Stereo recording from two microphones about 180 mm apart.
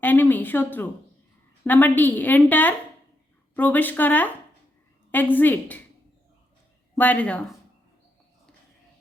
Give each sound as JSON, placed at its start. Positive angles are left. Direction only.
{"t": 0.0, "sound": "a woman's voice", "side_deg": 10}
{"t": 6.9, "sound": "a woman's voice", "side_deg": 10}